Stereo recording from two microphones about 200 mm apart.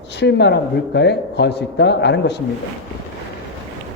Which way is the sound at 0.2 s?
60° left (ahead or behind).